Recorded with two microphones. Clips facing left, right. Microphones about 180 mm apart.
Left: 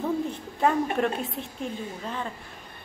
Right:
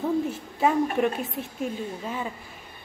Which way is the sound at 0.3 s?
5° right (ahead or behind).